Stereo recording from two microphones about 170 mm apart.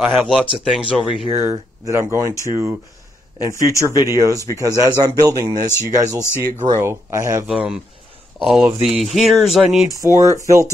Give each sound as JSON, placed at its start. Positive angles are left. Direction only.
{"t": 0.0, "sound": "music", "side_deg": 0}
{"t": 1.3, "sound": "speech", "side_deg": -15}
{"t": 7.4, "sound": "music", "side_deg": -5}
{"t": 8.4, "sound": "speech", "side_deg": 0}
{"t": 8.8, "sound": "music", "side_deg": 0}
{"t": 10.0, "sound": "speech", "side_deg": -20}